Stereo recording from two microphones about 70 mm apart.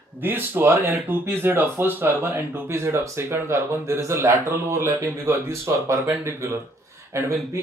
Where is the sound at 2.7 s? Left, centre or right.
Right.